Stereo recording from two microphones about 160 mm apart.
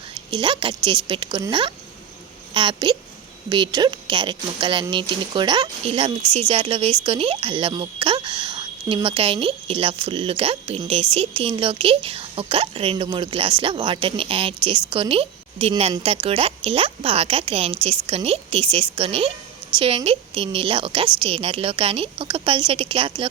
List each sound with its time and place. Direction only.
0.3 s a woman's voice: 30° right (ahead or behind)